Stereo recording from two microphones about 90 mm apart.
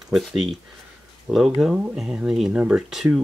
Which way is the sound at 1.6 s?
5° right (ahead or behind).